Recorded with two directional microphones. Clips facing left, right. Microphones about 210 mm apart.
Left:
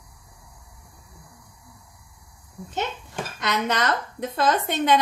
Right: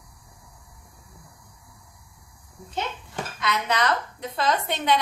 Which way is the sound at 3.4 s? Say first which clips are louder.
Left 1 dB; 45° left (ahead or behind).